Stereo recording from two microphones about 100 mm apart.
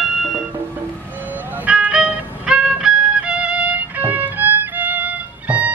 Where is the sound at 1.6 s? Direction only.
10° right (ahead or behind).